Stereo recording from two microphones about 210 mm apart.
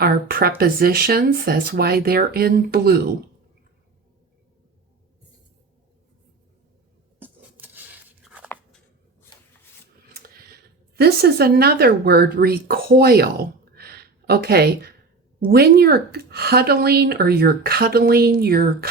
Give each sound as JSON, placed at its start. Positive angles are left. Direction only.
{"t": 0.0, "sound": "speech", "side_deg": -45}
{"t": 7.2, "sound": "a sound", "side_deg": -10}
{"t": 10.1, "sound": "speech", "side_deg": -45}